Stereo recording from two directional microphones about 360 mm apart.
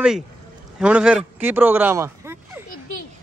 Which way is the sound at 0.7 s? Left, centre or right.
Centre.